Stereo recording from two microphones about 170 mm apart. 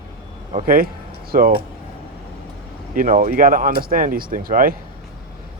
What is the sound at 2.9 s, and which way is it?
Speech, 50° right (ahead or behind).